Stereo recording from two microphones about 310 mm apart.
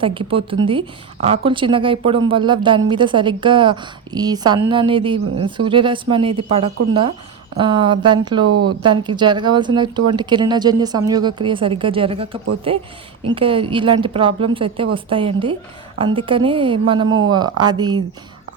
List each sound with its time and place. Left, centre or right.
0.0 s a woman's voice: centre
8.4 s speech: right
8.8 s a woman's voice: centre
17.1 s speech: right
17.6 s a woman's voice: centre